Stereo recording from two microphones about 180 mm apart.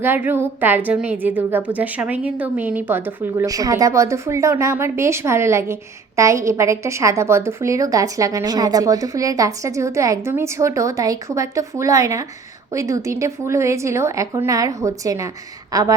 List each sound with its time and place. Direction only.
0.0 s a woman's voice: 10° right (ahead or behind)